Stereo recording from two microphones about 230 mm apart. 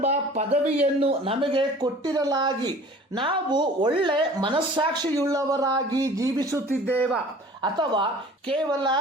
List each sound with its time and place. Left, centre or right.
0.0 s a woman's voice: right
6.8 s speech: centre
7.6 s a woman's voice: centre